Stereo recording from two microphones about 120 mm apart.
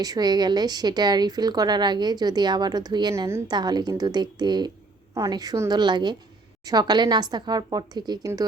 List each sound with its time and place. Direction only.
0.0 s a woman's voice: 35° right (ahead or behind)
3.4 s a woman's voice: 35° right (ahead or behind)